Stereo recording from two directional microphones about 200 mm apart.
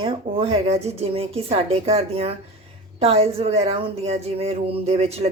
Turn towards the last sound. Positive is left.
turn(degrees=-30)  # may be behind; listen again after turning